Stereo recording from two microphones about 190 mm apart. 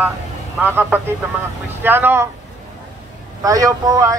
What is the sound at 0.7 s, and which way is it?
Speech, 10° right (ahead or behind).